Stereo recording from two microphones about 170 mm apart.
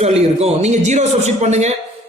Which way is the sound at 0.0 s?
40° right (ahead or behind).